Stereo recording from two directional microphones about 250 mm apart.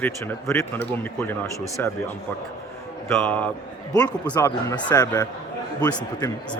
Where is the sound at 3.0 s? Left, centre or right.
Centre.